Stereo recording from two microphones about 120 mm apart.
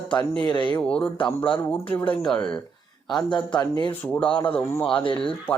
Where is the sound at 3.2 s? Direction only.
40° left (ahead or behind).